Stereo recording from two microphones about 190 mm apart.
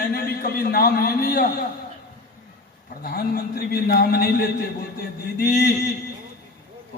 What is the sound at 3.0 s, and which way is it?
A man's voice, 55° left (ahead or behind).